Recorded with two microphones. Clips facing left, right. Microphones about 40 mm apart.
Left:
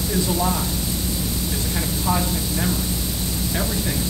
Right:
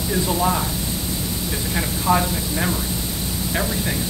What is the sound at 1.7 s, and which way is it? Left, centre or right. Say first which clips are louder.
Speech: right 5 dB; right.